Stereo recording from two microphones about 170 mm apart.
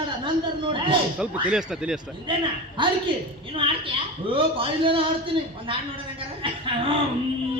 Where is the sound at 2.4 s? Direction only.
30° right (ahead or behind).